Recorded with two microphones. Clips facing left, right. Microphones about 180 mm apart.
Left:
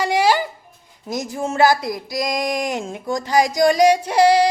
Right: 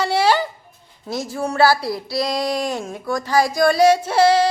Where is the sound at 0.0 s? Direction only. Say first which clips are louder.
Even; 15° left (ahead or behind).